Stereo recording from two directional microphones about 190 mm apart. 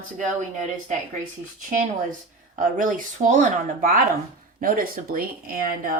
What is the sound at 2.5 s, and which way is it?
Speech, 45° right (ahead or behind).